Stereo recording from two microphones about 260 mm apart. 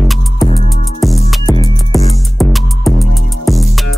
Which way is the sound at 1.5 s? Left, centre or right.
Centre.